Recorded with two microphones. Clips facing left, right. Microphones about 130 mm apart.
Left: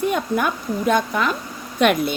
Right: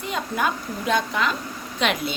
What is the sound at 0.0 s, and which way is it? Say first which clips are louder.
Speech: left 5 dB; 55° left (ahead or behind).